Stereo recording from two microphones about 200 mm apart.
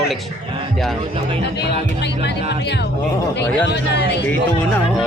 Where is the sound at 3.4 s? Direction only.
60° left (ahead or behind).